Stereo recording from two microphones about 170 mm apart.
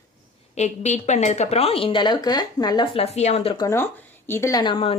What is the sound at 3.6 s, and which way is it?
Speech, 15° left (ahead or behind).